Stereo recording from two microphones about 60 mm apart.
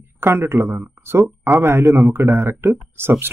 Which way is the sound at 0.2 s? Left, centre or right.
Right.